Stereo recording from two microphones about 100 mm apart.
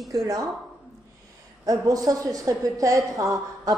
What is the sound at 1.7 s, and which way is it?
A woman's voice, 35° right (ahead or behind).